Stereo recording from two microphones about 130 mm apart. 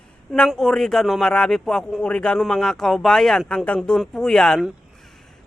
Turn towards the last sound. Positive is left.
turn(degrees=0)  # may be behind; listen again after turning